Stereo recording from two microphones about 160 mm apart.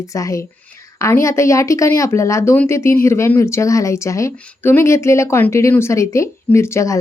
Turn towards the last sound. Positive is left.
turn(degrees=15)  # may be behind; listen again after turning